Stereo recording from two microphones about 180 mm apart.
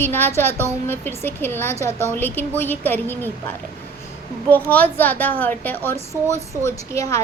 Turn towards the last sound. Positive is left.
turn(degrees=15)  # may be behind; listen again after turning